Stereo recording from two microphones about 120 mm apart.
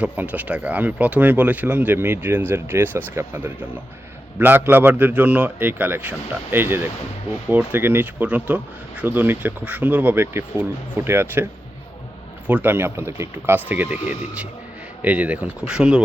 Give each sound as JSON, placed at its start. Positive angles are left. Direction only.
{"t": 0.0, "sound": "speech", "side_deg": -15}
{"t": 12.5, "sound": "speech", "side_deg": -15}